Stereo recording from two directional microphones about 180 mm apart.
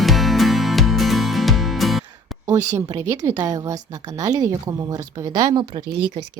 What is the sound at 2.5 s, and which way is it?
A woman's voice, 15° right (ahead or behind).